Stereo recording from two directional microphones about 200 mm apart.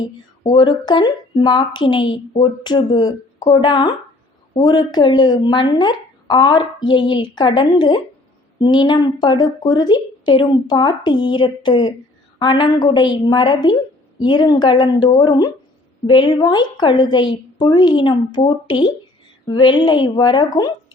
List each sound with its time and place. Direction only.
0.0 s speech: 20° left (ahead or behind)